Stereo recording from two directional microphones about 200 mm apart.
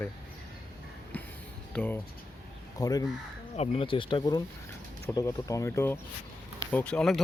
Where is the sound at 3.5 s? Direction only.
30° left (ahead or behind).